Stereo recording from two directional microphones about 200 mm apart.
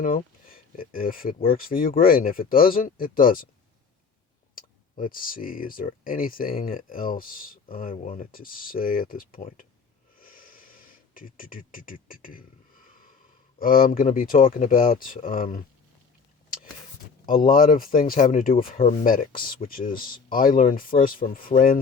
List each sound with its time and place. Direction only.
0.0 s speech: 45° left (ahead or behind)
4.5 s speech: 45° left (ahead or behind)
10.2 s a sound: 45° left (ahead or behind)
13.6 s speech: 45° left (ahead or behind)
17.2 s speech: 45° left (ahead or behind)